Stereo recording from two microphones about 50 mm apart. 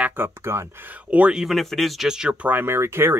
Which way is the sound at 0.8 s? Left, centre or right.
Right.